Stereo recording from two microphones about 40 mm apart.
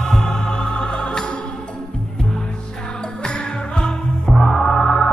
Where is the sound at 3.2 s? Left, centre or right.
Left.